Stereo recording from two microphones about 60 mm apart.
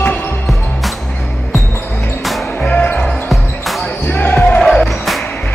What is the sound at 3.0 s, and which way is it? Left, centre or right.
Basketball bounce, centre.